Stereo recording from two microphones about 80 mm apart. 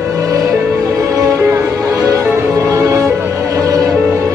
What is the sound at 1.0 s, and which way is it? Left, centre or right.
Music, right.